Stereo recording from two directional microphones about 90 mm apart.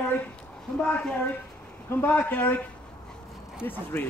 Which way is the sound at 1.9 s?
20° left (ahead or behind).